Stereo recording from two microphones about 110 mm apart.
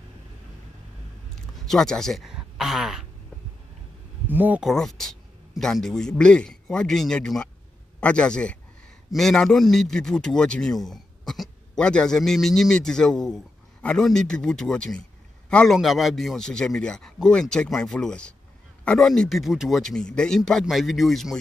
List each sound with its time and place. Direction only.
1.3 s speech: 5° left (ahead or behind)
4.3 s speech: 15° right (ahead or behind)
4.6 s a man's voice: 5° left (ahead or behind)